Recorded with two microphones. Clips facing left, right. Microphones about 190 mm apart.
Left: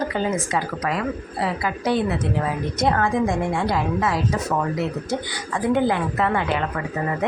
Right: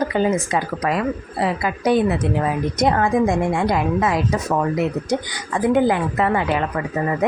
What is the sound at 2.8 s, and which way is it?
A woman's voice, 15° right (ahead or behind).